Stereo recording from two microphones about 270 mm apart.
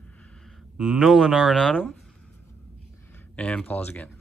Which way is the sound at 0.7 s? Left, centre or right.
Centre.